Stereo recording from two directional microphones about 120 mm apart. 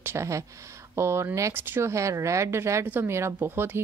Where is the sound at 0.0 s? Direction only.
20° right (ahead or behind).